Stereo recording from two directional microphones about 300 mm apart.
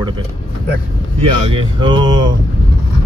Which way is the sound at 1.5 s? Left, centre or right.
Centre.